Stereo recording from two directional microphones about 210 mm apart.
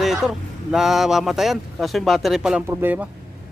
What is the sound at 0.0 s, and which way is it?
Speech, centre (ahead or behind).